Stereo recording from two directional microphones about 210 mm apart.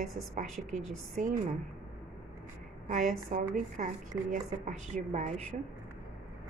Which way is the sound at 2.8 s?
40° right (ahead or behind).